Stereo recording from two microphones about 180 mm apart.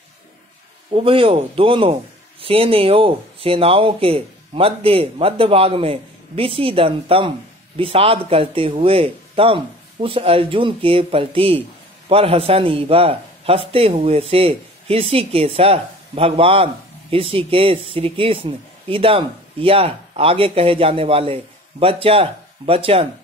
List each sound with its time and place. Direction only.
0.9 s speech: 30° right (ahead or behind)